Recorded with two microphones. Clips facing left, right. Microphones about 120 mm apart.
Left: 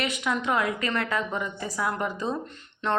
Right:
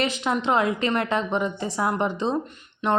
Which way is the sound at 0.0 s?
30° right (ahead or behind).